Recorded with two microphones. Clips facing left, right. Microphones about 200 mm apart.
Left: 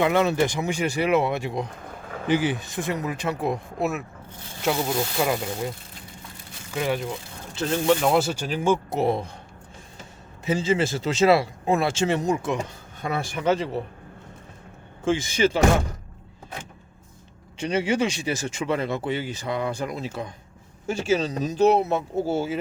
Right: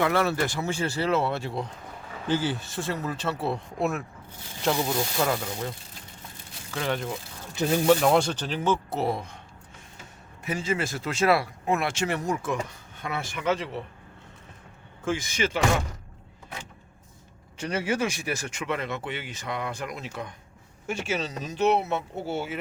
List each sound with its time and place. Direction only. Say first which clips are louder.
0.0 s speech: left 4 dB; 20° left (ahead or behind)
3.8 s speech: left 1 dB; 5° left (ahead or behind)
6.7 s speech: left 3 dB; 10° left (ahead or behind)
7.5 s speech: right 1 dB; 15° right (ahead or behind)
7.9 s speech: even; centre (ahead or behind); by 9.2 s 20° left (ahead or behind)
10.4 s speech: left 6 dB; 25° left (ahead or behind)
12.5 s speech: left 2 dB; 35° left (ahead or behind)
15.0 s speech: left 6 dB; 25° left (ahead or behind)
17.7 s speech: left 4 dB; 25° left (ahead or behind)